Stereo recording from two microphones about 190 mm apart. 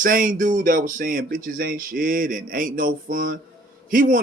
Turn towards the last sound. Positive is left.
turn(degrees=-45)  # may be behind; listen again after turning